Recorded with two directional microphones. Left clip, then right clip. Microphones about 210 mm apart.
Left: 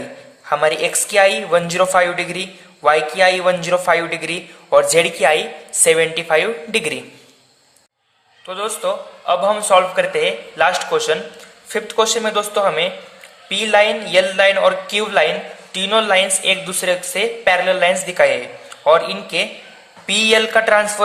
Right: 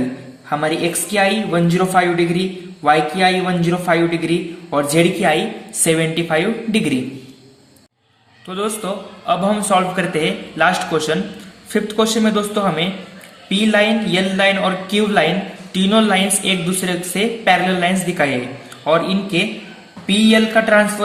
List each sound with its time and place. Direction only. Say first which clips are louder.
0.5 s a man's voice: left 2 dB; 40° left (ahead or behind)
8.4 s a man's voice: left 1 dB; 25° left (ahead or behind)